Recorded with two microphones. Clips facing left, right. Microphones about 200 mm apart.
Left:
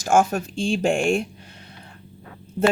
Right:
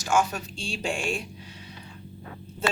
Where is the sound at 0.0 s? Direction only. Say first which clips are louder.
Left 6 dB; 50° left (ahead or behind).